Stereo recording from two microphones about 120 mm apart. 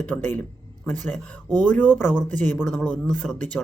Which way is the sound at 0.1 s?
15° left (ahead or behind).